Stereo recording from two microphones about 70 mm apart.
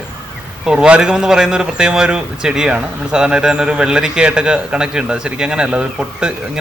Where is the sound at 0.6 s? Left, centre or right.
Centre.